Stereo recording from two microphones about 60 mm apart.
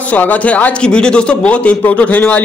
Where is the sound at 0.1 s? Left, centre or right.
Left.